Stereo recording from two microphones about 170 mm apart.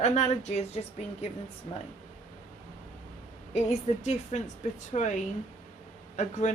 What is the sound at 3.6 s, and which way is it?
A woman's voice, 40° left (ahead or behind).